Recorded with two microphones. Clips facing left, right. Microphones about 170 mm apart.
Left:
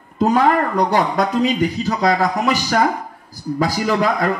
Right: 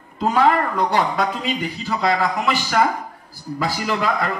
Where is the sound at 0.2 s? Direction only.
45° left (ahead or behind).